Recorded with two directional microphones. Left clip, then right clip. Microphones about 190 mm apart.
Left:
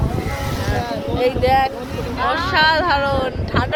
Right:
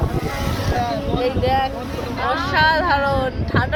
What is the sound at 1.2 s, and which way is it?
Speech, 65° left (ahead or behind).